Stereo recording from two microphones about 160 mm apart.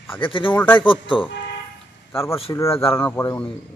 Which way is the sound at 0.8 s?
30° left (ahead or behind).